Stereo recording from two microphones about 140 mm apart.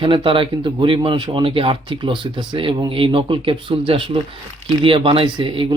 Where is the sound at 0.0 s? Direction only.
35° right (ahead or behind).